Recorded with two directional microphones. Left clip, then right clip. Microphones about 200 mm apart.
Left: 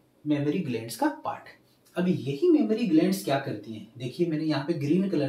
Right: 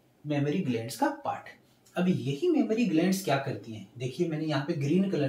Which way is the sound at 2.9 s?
10° left (ahead or behind).